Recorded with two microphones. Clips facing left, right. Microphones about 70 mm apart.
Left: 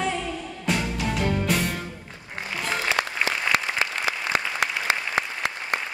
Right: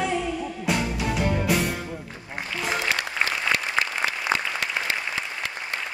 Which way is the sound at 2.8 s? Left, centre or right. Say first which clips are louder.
Left 1 dB; left.